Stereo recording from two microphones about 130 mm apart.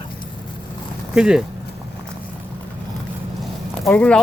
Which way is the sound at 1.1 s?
5° right (ahead or behind).